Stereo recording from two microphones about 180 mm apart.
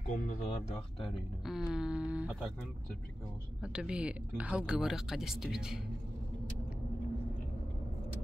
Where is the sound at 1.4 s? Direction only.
5° right (ahead or behind).